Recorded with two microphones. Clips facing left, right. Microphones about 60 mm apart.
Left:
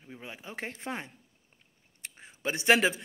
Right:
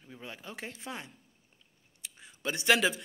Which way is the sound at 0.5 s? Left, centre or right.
Left.